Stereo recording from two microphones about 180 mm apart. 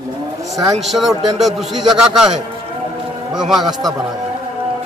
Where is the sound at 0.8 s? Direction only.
Centre (ahead or behind).